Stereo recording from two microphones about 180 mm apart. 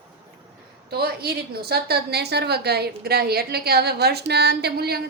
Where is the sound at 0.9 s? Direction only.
60° right (ahead or behind).